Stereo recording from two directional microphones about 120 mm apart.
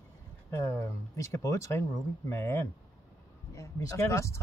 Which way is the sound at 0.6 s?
25° left (ahead or behind).